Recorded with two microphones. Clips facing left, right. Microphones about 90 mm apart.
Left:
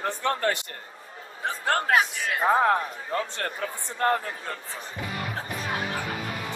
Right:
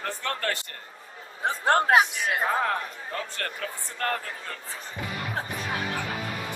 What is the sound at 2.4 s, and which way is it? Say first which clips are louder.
A man's voice: left 8 dB; 25° left (ahead or behind).